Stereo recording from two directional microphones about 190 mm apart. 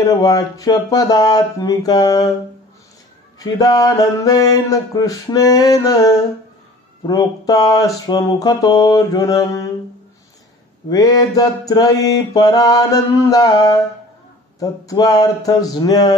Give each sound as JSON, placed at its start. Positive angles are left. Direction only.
{"t": 0.0, "sound": "mantra", "side_deg": 20}
{"t": 3.3, "sound": "mantra", "side_deg": 20}
{"t": 10.9, "sound": "mantra", "side_deg": 20}